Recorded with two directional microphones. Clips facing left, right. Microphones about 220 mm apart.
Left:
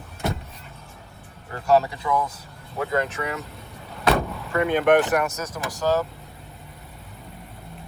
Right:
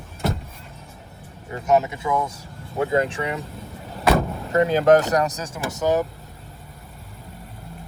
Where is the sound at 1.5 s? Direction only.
20° right (ahead or behind).